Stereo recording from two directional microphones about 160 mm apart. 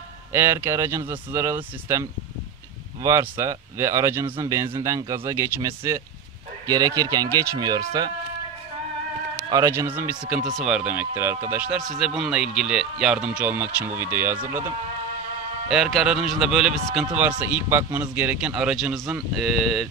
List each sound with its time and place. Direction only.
0.3 s speech: 15° right (ahead or behind)
9.5 s speech: 20° right (ahead or behind)
15.7 s speech: centre (ahead or behind)